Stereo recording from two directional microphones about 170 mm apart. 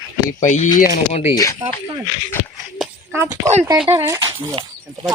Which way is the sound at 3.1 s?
15° right (ahead or behind).